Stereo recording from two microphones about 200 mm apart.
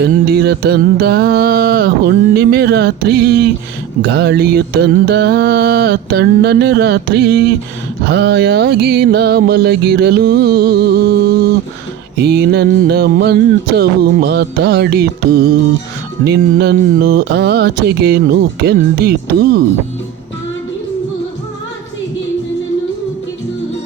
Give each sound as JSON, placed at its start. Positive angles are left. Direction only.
{"t": 0.0, "sound": "music", "side_deg": -55}
{"t": 4.0, "sound": "mantra", "side_deg": -55}
{"t": 8.0, "sound": "music", "side_deg": -55}
{"t": 12.2, "sound": "mantra", "side_deg": -55}
{"t": 13.7, "sound": "music", "side_deg": -55}
{"t": 16.2, "sound": "mantra", "side_deg": -55}
{"t": 18.6, "sound": "music", "side_deg": -50}